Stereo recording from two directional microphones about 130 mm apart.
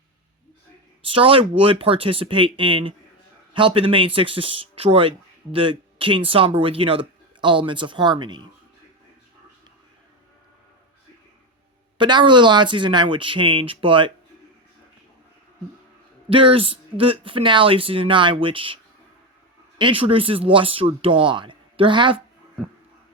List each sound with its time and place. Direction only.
1.0 s speech: 45° right (ahead or behind)
11.9 s speech: 35° right (ahead or behind)
16.3 s speech: 45° right (ahead or behind)
19.8 s speech: 45° right (ahead or behind)